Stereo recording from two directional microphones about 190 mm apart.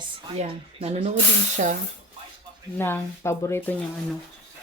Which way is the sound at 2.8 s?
10° left (ahead or behind).